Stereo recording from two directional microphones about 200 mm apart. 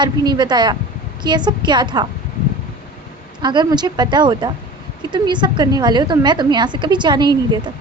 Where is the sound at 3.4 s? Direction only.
20° right (ahead or behind).